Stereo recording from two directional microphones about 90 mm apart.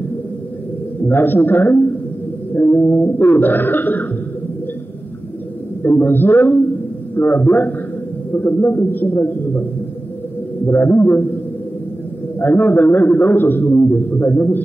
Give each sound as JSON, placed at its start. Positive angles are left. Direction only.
{"t": 1.0, "sound": "a man's voice", "side_deg": 20}
{"t": 5.9, "sound": "a man's voice", "side_deg": 20}
{"t": 10.7, "sound": "a man's voice", "side_deg": 25}
{"t": 12.4, "sound": "a man's voice", "side_deg": 20}